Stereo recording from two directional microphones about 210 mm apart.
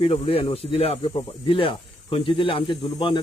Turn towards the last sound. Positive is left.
turn(degrees=20)  # may be behind; listen again after turning